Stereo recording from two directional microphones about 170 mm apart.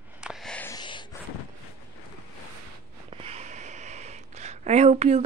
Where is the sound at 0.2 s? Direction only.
Centre (ahead or behind).